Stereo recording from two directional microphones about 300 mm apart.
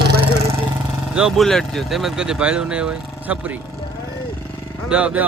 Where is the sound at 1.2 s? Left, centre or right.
Centre.